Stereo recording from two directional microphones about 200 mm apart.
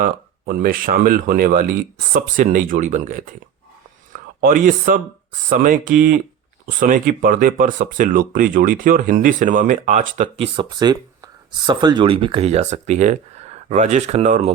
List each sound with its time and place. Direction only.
0.0 s speech: 45° right (ahead or behind)
10.3 s speech: 25° right (ahead or behind)